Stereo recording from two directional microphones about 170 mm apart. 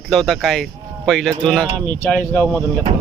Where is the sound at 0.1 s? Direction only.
Centre (ahead or behind).